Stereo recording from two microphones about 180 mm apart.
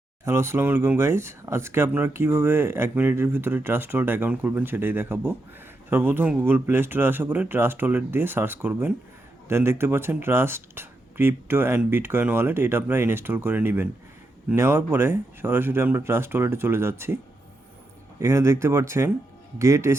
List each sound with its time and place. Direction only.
0.3 s speech: 15° right (ahead or behind)
18.2 s speech: 15° right (ahead or behind)